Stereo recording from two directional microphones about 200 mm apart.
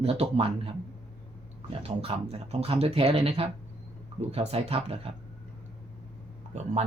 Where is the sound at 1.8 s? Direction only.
30° right (ahead or behind).